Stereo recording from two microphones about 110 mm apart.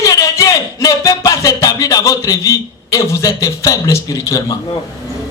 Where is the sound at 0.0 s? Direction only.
30° left (ahead or behind).